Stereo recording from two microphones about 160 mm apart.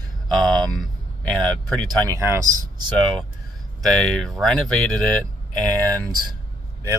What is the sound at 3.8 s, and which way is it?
Speech, centre (ahead or behind).